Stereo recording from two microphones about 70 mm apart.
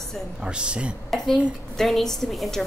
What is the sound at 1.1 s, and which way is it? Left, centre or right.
A woman's voice, centre.